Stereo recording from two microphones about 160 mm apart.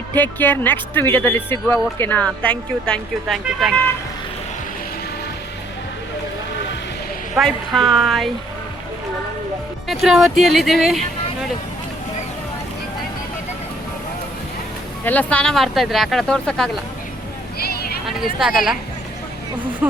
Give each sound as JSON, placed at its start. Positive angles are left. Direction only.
{"t": 0.2, "sound": "speech", "side_deg": 10}
{"t": 7.3, "sound": "speech", "side_deg": 0}
{"t": 9.9, "sound": "speech", "side_deg": 0}
{"t": 15.0, "sound": "speech", "side_deg": 10}
{"t": 17.6, "sound": "a sound", "side_deg": 75}
{"t": 18.0, "sound": "speech", "side_deg": 0}
{"t": 19.8, "sound": "speech", "side_deg": -5}